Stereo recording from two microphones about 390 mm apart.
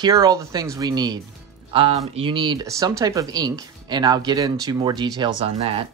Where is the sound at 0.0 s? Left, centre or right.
Centre.